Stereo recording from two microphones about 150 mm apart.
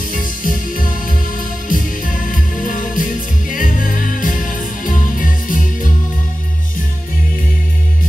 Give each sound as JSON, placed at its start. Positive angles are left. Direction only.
{"t": 0.1, "sound": "music", "side_deg": 65}